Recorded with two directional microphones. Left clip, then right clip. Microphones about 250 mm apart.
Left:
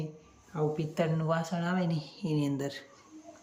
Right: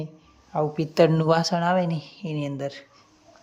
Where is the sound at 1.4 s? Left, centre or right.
Centre.